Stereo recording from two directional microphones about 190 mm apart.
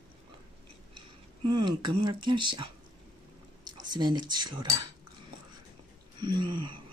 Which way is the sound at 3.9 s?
20° right (ahead or behind).